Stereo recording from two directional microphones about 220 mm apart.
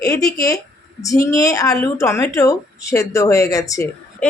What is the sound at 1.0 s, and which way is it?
Speech, 15° left (ahead or behind).